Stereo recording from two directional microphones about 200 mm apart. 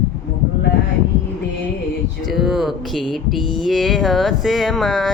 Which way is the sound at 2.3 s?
Centre (ahead or behind).